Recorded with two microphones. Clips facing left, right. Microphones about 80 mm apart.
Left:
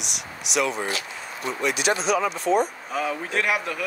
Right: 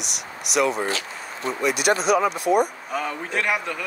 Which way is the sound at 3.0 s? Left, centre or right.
Centre.